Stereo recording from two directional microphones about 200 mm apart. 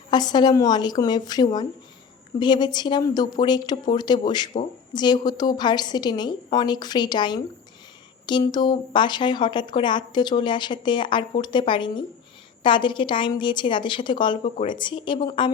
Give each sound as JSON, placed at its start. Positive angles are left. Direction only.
{"t": 0.1, "sound": "a woman's voice", "side_deg": 20}